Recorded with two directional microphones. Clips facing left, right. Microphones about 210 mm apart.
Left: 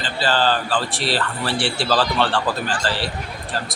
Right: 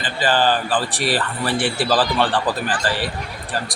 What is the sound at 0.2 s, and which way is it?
A man's voice, 15° right (ahead or behind).